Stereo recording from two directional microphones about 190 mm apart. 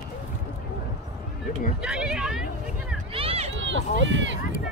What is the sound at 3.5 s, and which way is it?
Run, 80° right.